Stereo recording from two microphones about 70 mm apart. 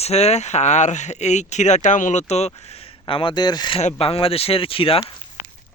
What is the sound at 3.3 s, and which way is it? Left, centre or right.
Speech, left.